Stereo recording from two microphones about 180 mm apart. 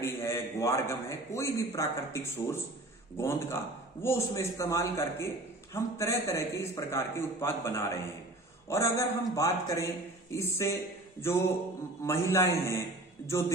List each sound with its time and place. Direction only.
0.0 s a man's voice: 15° left (ahead or behind)
12.0 s a man's voice: 15° left (ahead or behind)